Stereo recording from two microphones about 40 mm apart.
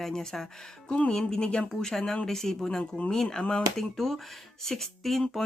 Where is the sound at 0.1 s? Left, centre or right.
Centre.